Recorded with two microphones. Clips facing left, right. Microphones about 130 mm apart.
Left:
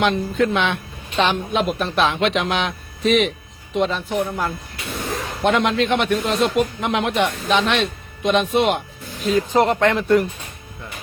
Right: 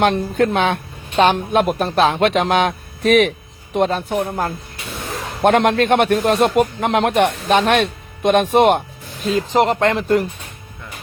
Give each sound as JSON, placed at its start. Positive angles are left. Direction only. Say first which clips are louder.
{"t": 0.1, "sound": "speech", "louder": "right 2 dB", "side_deg": -55}
{"t": 5.4, "sound": "speech", "louder": "right 4 dB", "side_deg": -50}
{"t": 9.2, "sound": "speech", "louder": "right 1 dB", "side_deg": -35}